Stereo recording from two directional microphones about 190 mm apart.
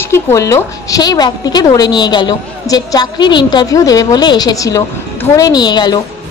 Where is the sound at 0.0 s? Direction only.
15° left (ahead or behind).